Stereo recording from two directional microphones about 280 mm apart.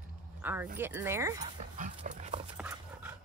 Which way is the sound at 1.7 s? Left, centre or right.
Right.